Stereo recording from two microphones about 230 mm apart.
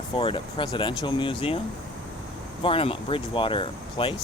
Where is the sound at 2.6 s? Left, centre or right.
Left.